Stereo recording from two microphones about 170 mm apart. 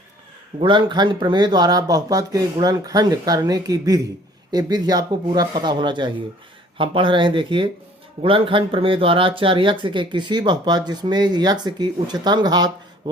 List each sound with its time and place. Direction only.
0.6 s speech: 30° right (ahead or behind)